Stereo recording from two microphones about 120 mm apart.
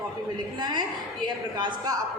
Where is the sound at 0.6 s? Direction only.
35° right (ahead or behind).